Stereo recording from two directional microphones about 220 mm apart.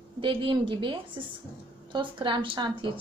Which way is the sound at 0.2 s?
20° right (ahead or behind).